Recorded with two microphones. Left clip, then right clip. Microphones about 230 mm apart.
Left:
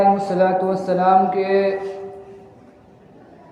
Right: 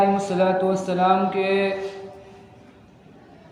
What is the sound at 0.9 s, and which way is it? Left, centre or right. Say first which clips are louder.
Speech: left 6 dB; right.